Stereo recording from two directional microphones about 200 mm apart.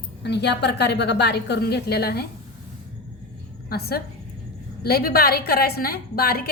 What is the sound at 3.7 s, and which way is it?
A woman's voice, 50° left (ahead or behind).